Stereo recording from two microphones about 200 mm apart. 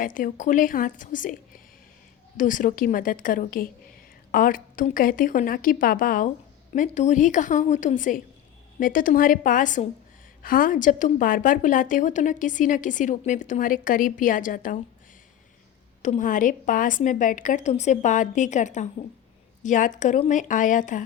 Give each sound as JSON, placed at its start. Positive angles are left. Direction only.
{"t": 0.0, "sound": "a woman's voice", "side_deg": 45}
{"t": 16.0, "sound": "a woman's voice", "side_deg": 40}